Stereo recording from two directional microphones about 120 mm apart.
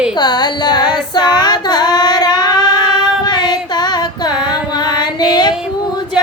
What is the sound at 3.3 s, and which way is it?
Music, 40° left (ahead or behind).